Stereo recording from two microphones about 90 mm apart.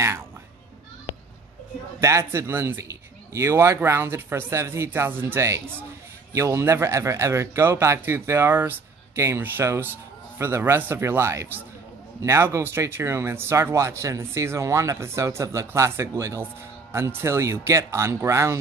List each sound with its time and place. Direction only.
2.0 s speech: 35° right (ahead or behind)